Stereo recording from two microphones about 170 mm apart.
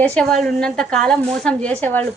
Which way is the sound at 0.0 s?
5° left (ahead or behind).